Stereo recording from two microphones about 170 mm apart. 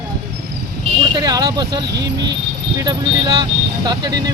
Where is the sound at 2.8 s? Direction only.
25° right (ahead or behind).